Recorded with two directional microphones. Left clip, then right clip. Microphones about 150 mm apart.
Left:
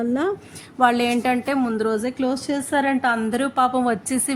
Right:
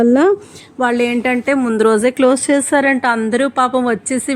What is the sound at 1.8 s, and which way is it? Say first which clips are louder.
Speech: right 11 dB; 50° right (ahead or behind).